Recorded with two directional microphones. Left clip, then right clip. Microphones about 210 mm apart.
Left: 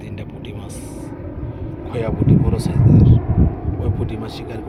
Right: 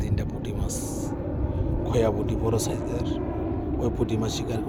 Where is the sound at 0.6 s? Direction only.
15° right (ahead or behind).